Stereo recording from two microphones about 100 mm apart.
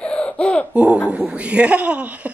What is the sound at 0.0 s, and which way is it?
Laughter, 10° left (ahead or behind).